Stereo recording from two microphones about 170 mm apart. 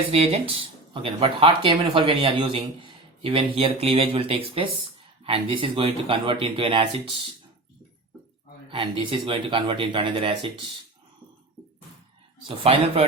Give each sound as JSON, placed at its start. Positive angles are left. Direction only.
{"t": 0.1, "sound": "speech", "side_deg": -35}
{"t": 8.7, "sound": "speech", "side_deg": -30}
{"t": 12.5, "sound": "speech", "side_deg": -35}